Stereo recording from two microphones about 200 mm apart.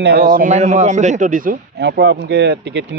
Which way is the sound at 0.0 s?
50° right (ahead or behind).